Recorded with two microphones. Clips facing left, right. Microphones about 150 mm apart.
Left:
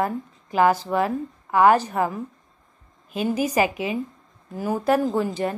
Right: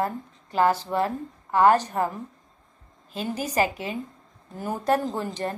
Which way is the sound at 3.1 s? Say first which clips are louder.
Left 4 dB; 10° left (ahead or behind).